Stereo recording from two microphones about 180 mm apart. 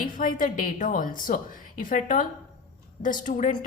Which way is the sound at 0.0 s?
50° left (ahead or behind).